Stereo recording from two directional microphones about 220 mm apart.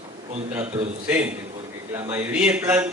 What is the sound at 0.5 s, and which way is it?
Speech, 10° right (ahead or behind).